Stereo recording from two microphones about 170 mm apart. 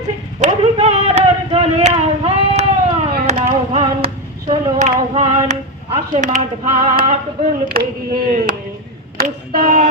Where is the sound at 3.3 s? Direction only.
35° right (ahead or behind).